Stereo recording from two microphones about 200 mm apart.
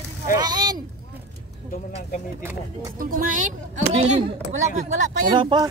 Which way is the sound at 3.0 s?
45° right (ahead or behind).